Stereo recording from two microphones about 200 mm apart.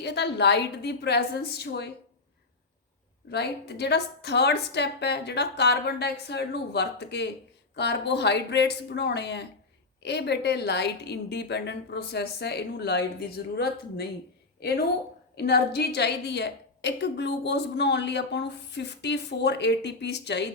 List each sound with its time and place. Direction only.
0.0 s a woman's voice: 55° left (ahead or behind)
3.2 s a woman's voice: 55° left (ahead or behind)
15.4 s a woman's voice: 55° left (ahead or behind)